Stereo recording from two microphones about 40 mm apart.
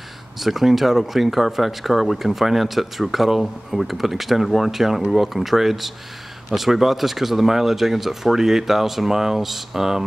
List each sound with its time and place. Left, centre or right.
0.4 s speech: centre